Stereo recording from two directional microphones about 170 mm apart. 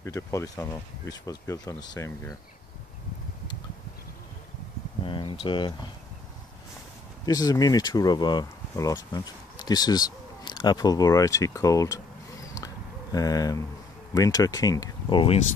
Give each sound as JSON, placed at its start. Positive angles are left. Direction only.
{"t": 0.0, "sound": "speech", "side_deg": 20}
{"t": 5.0, "sound": "speech", "side_deg": 30}
{"t": 7.2, "sound": "speech", "side_deg": 20}